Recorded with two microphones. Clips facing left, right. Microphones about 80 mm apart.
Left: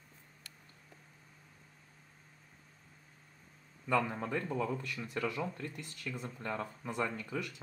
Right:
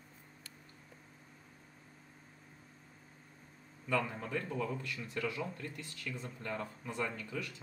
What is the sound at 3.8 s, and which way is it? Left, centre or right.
Speech, left.